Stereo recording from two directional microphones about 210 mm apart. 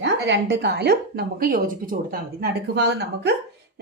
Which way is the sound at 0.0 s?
55° right (ahead or behind).